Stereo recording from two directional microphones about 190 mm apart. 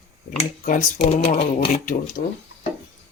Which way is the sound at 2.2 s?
45° left (ahead or behind).